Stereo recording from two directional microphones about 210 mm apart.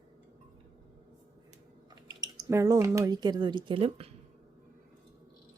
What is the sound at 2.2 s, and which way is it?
Speech, 15° right (ahead or behind).